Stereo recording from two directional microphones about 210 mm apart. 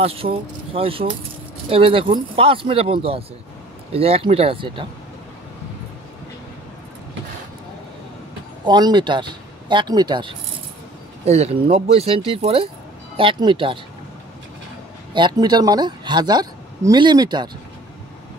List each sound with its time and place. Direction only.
0.0 s speech: 25° right (ahead or behind)
8.6 s speech: 20° right (ahead or behind)
15.1 s speech: 20° right (ahead or behind)